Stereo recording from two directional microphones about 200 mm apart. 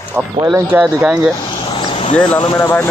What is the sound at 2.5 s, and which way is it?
Speech, 10° left (ahead or behind).